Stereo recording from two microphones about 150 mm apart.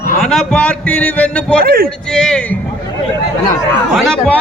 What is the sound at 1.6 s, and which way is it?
Speech, 80° right.